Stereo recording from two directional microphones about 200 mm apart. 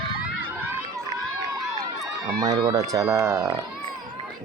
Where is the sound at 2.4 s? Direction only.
20° right (ahead or behind).